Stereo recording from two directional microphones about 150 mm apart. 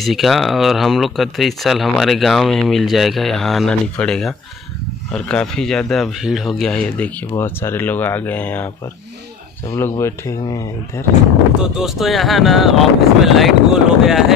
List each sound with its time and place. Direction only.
0.0 s speech: centre (ahead or behind)
7.3 s speech: 15° left (ahead or behind)
9.7 s speech: 20° left (ahead or behind)
11.6 s speech: 5° right (ahead or behind)